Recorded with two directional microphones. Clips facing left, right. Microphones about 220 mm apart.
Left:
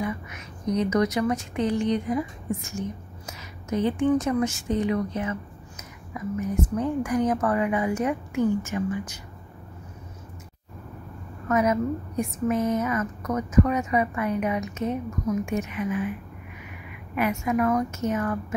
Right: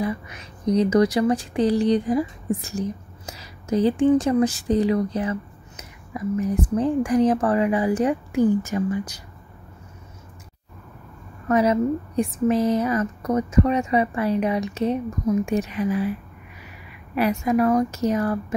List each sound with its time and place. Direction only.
0.0 s a woman's voice: 35° right (ahead or behind)
11.4 s a woman's voice: 30° right (ahead or behind)